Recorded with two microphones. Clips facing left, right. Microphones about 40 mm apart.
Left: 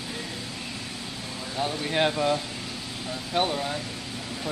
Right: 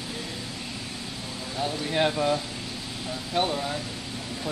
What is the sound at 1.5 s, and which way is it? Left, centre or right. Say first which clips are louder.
Speech: even; centre.